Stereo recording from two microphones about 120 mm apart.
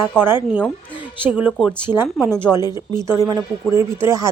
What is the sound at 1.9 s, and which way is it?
Speech, 15° right (ahead or behind).